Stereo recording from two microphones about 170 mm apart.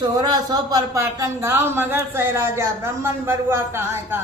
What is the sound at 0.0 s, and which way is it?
Speech, 25° right (ahead or behind).